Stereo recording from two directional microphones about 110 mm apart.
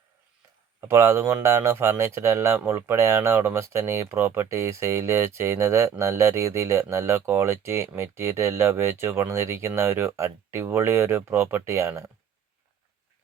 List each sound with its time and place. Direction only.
0.8 s speech: 25° right (ahead or behind)